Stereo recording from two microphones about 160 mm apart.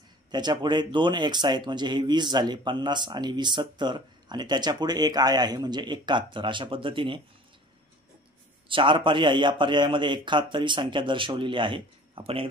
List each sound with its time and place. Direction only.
0.3 s speech: 25° right (ahead or behind)
8.6 s a man's voice: 30° right (ahead or behind)